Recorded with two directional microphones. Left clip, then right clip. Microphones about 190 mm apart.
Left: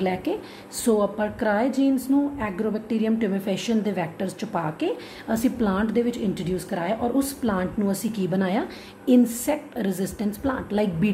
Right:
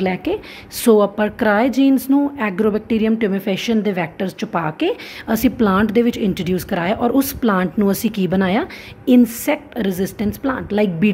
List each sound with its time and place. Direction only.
0.0 s a woman's voice: 30° right (ahead or behind)